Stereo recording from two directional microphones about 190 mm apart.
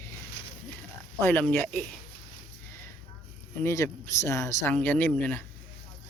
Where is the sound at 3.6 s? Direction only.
15° left (ahead or behind).